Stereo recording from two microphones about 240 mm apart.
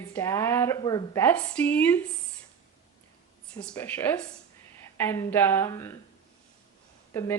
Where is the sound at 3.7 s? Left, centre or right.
Centre.